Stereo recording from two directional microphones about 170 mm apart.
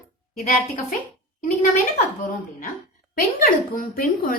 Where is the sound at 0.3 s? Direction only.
55° left (ahead or behind).